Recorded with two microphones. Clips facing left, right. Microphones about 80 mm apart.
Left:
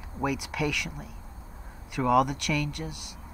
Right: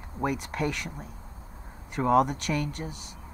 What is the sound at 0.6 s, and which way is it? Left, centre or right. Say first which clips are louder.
Speech: left 1 dB; left.